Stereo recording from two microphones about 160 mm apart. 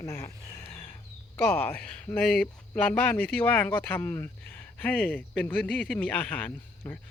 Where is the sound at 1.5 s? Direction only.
10° left (ahead or behind).